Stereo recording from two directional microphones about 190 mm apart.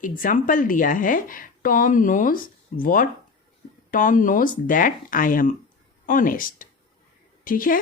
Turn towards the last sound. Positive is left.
turn(degrees=45)  # may be behind; listen again after turning